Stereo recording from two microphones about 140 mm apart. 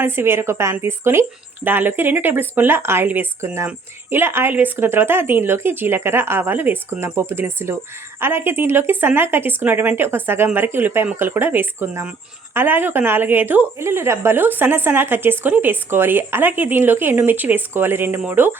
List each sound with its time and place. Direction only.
0.0 s a woman's voice: 15° right (ahead or behind)